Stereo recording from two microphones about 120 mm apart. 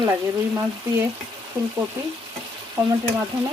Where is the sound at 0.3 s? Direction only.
25° right (ahead or behind).